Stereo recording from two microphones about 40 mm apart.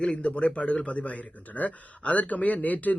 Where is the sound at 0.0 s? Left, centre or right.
Left.